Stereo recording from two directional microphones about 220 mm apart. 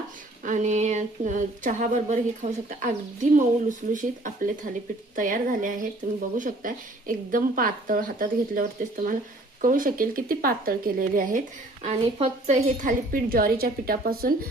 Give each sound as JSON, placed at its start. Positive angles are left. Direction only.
{"t": 0.4, "sound": "speech", "side_deg": -35}